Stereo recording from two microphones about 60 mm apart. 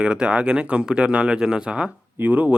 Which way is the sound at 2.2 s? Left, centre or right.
Right.